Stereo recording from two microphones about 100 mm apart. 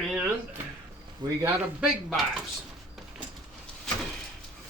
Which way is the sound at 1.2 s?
50° right (ahead or behind).